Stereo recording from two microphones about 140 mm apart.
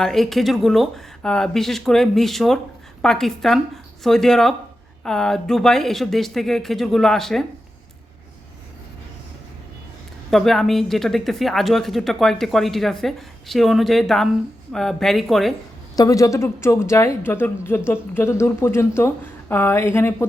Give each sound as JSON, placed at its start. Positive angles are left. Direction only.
{"t": 0.0, "sound": "speech", "side_deg": 0}
{"t": 10.3, "sound": "speech", "side_deg": 0}
{"t": 16.0, "sound": "a woman's voice", "side_deg": 25}